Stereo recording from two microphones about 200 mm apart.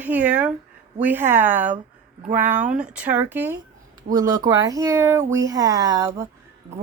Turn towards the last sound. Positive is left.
turn(degrees=-15)  # may be behind; listen again after turning